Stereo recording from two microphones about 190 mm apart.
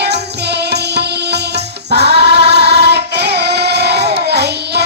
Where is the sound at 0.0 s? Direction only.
60° right (ahead or behind).